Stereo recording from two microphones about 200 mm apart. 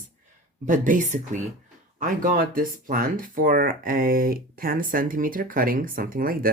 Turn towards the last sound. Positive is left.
turn(degrees=-45)  # may be behind; listen again after turning